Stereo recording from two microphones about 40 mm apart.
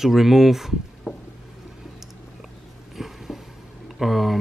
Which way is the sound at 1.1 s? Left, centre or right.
Right.